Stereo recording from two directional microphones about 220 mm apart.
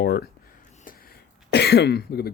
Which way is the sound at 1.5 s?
50° left (ahead or behind).